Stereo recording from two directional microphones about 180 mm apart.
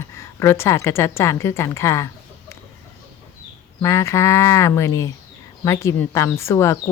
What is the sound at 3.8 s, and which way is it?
A woman's voice, 15° left (ahead or behind).